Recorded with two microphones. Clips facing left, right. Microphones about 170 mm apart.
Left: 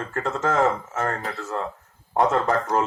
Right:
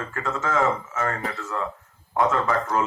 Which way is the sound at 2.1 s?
40° left (ahead or behind).